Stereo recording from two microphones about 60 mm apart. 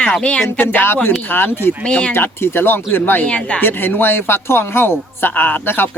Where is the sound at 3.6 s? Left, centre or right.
Left.